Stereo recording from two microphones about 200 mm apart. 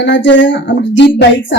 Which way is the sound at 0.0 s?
65° left (ahead or behind).